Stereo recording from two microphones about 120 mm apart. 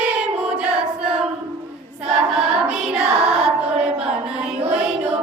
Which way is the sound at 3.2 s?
5° right (ahead or behind).